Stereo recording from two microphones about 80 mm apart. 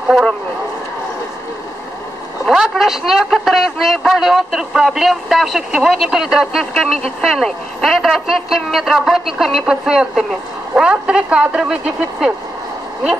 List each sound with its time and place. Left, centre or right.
0.1 s speech: centre
2.4 s a man's voice: centre